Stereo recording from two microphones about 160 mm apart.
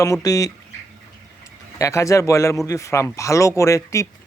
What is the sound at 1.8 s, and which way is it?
Speech, 20° left (ahead or behind).